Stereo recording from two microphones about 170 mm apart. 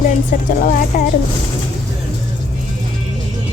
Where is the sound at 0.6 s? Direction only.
55° left (ahead or behind).